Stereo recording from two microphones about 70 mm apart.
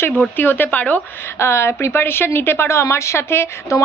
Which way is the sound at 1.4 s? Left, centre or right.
Left.